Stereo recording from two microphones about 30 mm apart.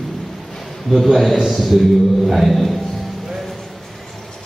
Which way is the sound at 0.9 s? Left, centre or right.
Centre.